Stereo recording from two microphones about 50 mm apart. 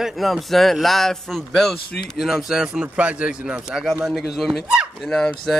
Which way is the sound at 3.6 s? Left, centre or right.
Centre.